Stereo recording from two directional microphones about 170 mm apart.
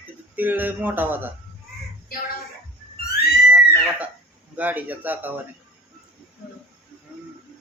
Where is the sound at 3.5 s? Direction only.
5° right (ahead or behind).